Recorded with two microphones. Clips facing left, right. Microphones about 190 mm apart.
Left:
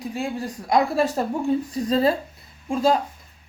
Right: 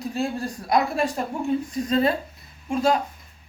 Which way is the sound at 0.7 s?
35° left (ahead or behind).